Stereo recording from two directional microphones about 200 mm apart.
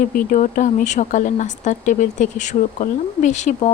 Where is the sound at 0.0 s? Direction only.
40° left (ahead or behind).